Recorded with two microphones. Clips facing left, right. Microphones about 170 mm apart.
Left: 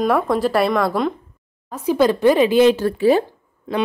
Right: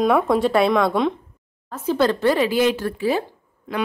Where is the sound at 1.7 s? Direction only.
15° left (ahead or behind).